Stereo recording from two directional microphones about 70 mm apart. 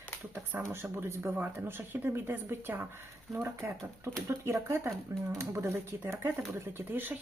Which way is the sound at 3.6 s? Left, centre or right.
Right.